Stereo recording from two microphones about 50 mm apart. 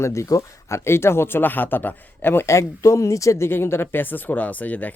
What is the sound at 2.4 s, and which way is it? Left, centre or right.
Speech, left.